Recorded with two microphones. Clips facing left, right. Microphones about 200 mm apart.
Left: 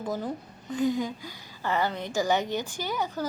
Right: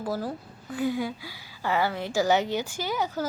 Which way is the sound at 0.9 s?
10° right (ahead or behind).